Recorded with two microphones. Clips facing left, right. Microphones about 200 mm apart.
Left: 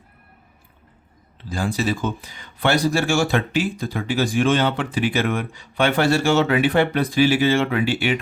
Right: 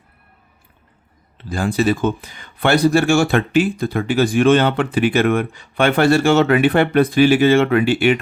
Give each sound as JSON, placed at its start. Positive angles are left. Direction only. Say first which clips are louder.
{"t": 1.5, "sound": "speech", "louder": "right 5 dB", "side_deg": -55}